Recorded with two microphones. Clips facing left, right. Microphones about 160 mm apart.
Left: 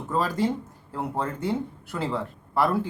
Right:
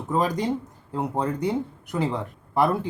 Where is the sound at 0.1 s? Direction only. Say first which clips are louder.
Right 1 dB; 15° right (ahead or behind).